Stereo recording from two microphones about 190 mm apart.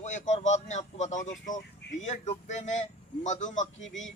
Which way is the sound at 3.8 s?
85° left.